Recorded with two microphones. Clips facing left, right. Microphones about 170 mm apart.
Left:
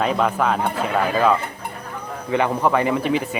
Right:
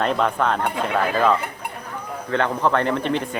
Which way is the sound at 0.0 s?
5° left (ahead or behind).